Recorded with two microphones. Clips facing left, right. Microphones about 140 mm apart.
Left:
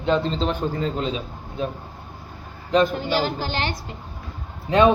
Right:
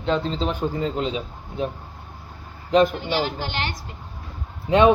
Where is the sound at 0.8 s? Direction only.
20° right (ahead or behind).